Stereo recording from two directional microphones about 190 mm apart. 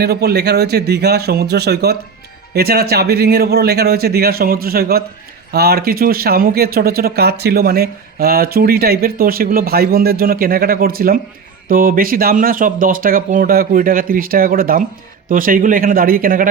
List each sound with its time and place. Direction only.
0.0 s speech: 55° right (ahead or behind)